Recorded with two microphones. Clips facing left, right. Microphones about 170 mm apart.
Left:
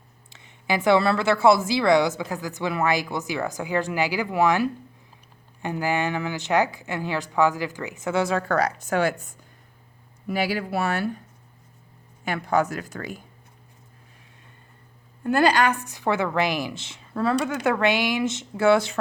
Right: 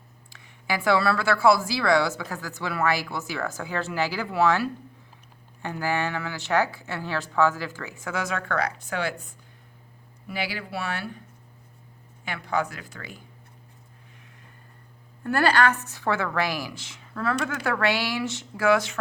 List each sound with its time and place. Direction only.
0.3 s speech: 25° left (ahead or behind); by 11.2 s 45° left (ahead or behind)
12.2 s speech: 45° left (ahead or behind)
15.2 s speech: 15° left (ahead or behind)